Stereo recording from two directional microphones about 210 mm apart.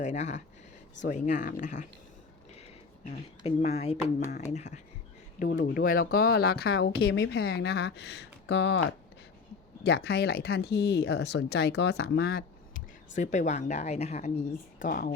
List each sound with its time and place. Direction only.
0.0 s a woman's voice: 35° left (ahead or behind); by 8.8 s 55° left (ahead or behind)
9.8 s a woman's voice: 50° left (ahead or behind)